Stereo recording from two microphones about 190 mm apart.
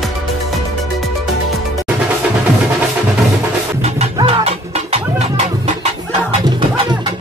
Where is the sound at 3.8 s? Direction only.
35° right (ahead or behind).